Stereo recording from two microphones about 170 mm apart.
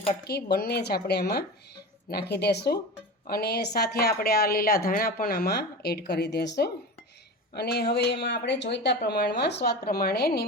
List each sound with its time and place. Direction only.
0.3 s a woman's voice: 70° left (ahead or behind); by 6.7 s 85° left
7.5 s a woman's voice: 70° left (ahead or behind)